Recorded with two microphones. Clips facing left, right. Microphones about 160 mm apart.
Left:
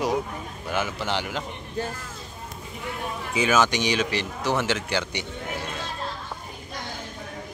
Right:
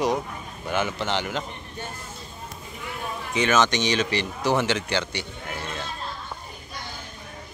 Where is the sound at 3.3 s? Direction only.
10° left (ahead or behind).